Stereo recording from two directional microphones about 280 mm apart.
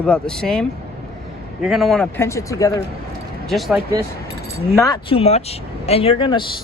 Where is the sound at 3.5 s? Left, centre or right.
Centre.